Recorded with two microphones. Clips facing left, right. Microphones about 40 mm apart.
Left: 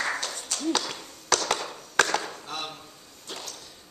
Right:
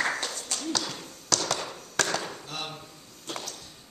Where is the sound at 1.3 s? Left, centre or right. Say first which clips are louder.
Left 3 dB; left.